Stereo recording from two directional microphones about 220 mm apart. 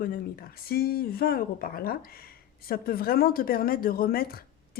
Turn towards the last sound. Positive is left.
turn(degrees=40)  # may be behind; listen again after turning